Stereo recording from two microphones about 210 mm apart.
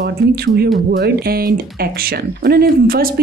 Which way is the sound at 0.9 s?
45° right (ahead or behind).